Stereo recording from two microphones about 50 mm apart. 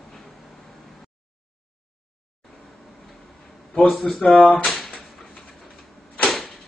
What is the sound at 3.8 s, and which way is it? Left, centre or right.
Speech, centre.